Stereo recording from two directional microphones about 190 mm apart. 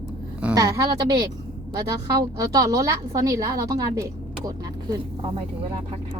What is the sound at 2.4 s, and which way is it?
A woman's voice, 20° right (ahead or behind).